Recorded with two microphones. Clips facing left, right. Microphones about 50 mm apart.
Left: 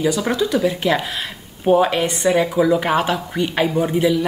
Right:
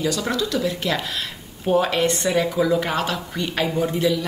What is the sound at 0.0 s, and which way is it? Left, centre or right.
A man's voice, centre.